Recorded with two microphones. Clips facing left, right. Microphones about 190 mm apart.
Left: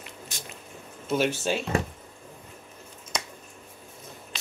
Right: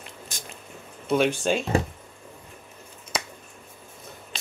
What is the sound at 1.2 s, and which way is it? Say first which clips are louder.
Speech: right 2 dB; 5° left (ahead or behind).